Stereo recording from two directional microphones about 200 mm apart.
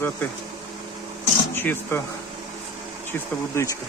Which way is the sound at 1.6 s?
10° left (ahead or behind).